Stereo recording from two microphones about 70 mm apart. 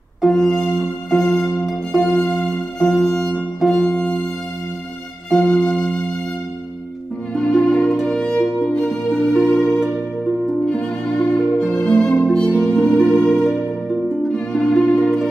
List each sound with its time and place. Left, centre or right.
0.3 s music: centre
5.4 s music: centre
7.3 s music: centre
9.6 s music: centre
10.6 s music: centre
12.6 s music: left
13.0 s music: centre